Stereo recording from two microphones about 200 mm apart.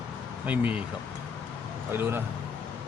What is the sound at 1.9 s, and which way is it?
Speech, 10° right (ahead or behind).